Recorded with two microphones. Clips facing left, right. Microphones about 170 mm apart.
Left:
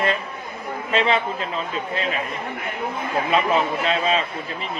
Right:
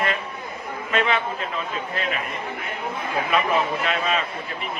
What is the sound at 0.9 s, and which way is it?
Speech, 30° left (ahead or behind).